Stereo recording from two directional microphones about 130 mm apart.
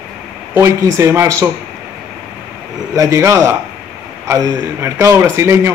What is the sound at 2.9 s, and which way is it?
A man's voice, 25° right (ahead or behind).